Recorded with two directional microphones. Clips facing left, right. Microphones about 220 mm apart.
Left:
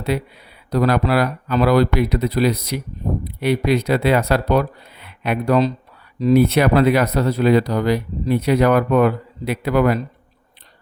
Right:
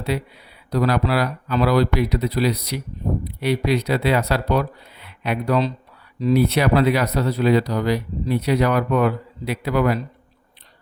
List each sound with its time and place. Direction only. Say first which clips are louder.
0.1 s speech: left 2 dB; 50° left (ahead or behind)